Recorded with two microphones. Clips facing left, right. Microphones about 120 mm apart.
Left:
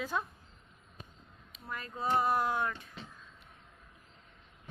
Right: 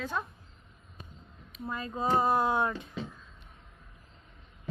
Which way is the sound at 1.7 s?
15° right (ahead or behind).